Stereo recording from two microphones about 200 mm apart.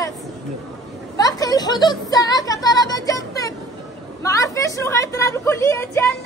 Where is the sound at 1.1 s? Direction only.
20° left (ahead or behind).